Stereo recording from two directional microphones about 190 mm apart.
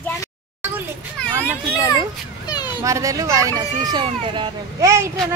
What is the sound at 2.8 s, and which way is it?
Speech, 15° right (ahead or behind).